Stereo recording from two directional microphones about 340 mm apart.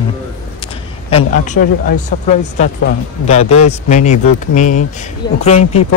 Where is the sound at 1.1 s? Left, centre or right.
Left.